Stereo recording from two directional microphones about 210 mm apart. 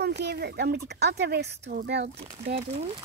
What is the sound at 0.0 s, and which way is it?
Speech, 50° right (ahead or behind).